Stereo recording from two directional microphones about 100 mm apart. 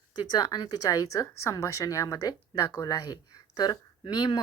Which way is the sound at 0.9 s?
35° left (ahead or behind).